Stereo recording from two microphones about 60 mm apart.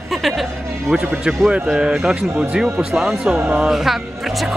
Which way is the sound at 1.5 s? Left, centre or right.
Centre.